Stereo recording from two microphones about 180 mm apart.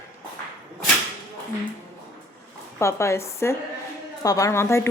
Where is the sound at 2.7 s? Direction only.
15° left (ahead or behind).